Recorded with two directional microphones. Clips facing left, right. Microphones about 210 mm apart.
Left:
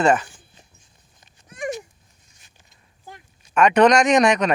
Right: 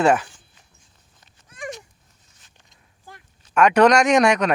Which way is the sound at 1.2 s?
15° left (ahead or behind).